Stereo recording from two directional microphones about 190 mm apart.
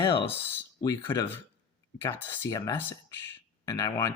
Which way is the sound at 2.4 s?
20° left (ahead or behind).